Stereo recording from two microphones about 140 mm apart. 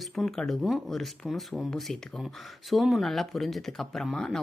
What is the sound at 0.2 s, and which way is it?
Speech, centre (ahead or behind).